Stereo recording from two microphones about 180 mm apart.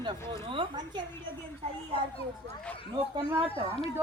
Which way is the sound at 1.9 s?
30° left (ahead or behind).